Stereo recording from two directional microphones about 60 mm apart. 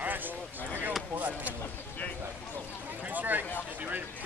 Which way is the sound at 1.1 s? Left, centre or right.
Right.